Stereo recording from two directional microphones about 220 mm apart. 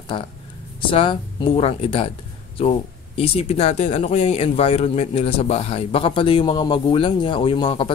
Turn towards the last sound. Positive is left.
turn(degrees=25)  # may be behind; listen again after turning